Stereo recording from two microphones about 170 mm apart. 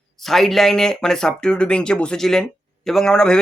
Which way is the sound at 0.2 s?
Centre (ahead or behind).